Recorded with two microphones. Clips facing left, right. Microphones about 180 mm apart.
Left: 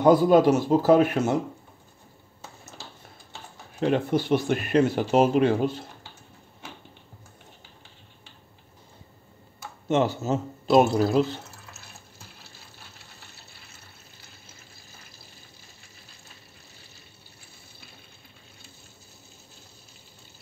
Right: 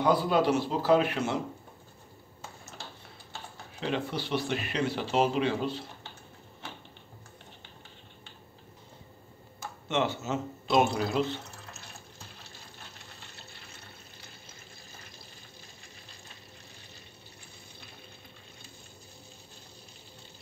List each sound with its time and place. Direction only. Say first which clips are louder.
0.0 s speech: left 8 dB; 45° left (ahead or behind)
3.8 s speech: left 9 dB; 50° left (ahead or behind)
9.8 s a man's voice: left 6 dB; 40° left (ahead or behind)